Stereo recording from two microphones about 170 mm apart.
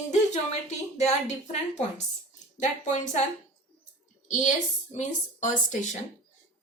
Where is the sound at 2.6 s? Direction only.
45° left (ahead or behind).